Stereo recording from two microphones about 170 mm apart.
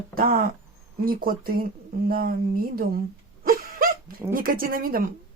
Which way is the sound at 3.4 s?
55° right (ahead or behind).